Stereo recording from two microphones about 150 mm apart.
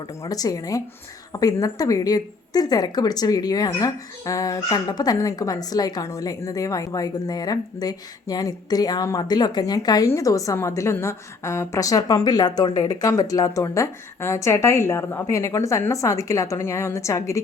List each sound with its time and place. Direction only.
0.2 s speech: 25° left (ahead or behind)